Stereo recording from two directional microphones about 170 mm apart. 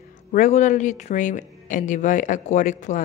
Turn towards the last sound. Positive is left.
turn(degrees=50)  # may be behind; listen again after turning